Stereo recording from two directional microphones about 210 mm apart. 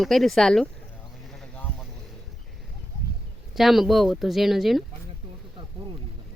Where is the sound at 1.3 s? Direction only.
5° left (ahead or behind).